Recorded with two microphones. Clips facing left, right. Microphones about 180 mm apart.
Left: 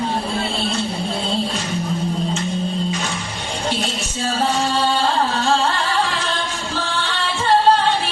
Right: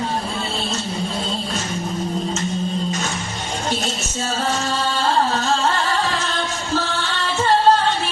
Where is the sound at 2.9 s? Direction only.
45° right (ahead or behind).